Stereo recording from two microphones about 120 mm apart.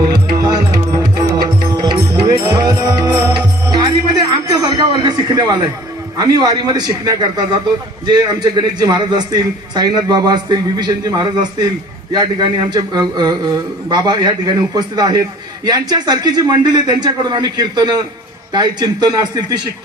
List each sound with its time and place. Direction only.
0.0 s music: 35° right (ahead or behind)
4.4 s a man's voice: 30° right (ahead or behind)